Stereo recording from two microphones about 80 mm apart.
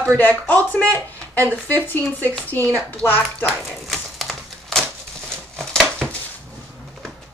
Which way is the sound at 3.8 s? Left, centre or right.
Centre.